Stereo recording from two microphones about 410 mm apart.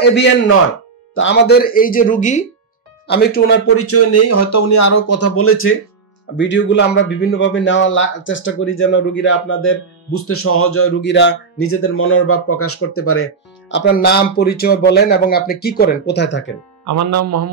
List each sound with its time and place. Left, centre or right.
0.1 s speech: left
16.8 s speech: right